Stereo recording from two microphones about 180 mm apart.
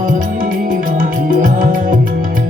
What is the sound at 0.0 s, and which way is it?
Music, 50° right (ahead or behind).